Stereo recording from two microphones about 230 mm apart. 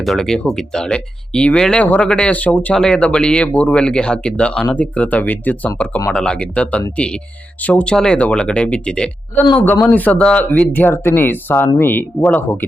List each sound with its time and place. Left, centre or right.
0.0 s speech: centre